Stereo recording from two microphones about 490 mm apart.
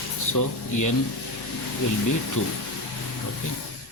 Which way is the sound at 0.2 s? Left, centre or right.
Left.